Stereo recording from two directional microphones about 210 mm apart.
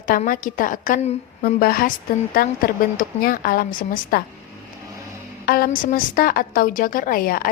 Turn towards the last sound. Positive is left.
turn(degrees=45)  # may be behind; listen again after turning